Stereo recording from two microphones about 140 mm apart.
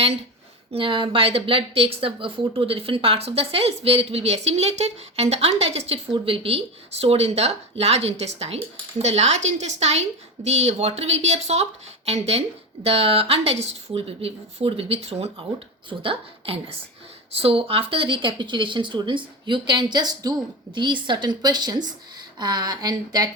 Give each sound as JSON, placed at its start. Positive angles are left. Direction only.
{"t": 0.7, "sound": "speech", "side_deg": -40}